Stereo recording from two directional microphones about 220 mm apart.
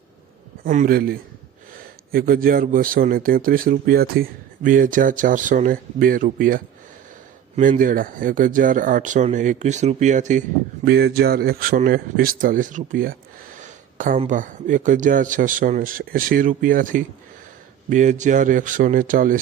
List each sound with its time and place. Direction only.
0.6 s speech: 40° right (ahead or behind)
10.8 s speech: 45° right (ahead or behind)